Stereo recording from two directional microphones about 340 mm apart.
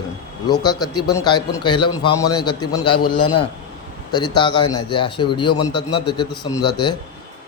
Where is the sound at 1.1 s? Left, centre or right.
Centre.